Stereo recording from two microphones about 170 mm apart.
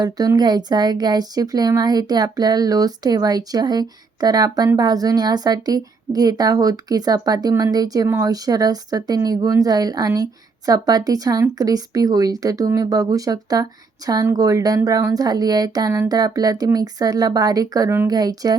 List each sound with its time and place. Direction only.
0.0 s speech: 25° right (ahead or behind)